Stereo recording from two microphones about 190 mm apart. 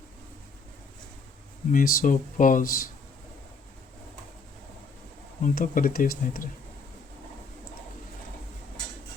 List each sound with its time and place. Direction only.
1.7 s speech: 45° left (ahead or behind)
5.4 s speech: 45° left (ahead or behind)